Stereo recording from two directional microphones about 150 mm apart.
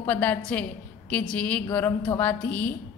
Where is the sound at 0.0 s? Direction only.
10° left (ahead or behind).